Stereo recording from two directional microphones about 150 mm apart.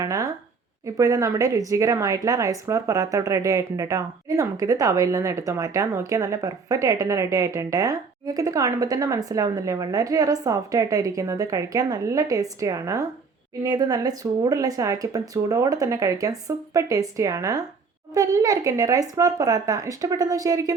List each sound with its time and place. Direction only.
0.0 s speech: 20° right (ahead or behind)